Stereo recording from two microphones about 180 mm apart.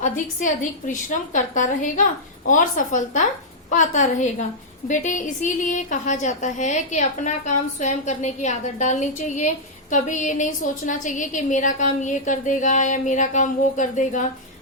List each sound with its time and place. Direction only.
0.0 s a woman's voice: 45° left (ahead or behind)